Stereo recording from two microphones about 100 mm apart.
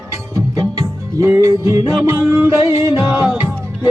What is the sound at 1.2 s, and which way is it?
Music, 30° right (ahead or behind).